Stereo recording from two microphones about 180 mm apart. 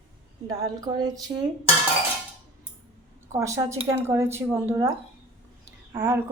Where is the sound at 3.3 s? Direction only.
15° right (ahead or behind).